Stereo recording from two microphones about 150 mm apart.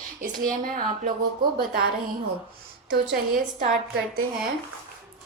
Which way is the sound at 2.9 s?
80° right.